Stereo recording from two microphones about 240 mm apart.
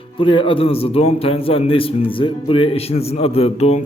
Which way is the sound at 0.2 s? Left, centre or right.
Left.